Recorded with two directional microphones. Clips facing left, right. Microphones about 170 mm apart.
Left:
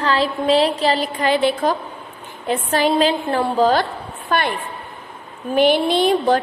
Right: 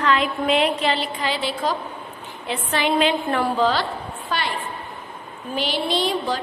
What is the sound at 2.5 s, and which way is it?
A woman's voice, 40° left (ahead or behind).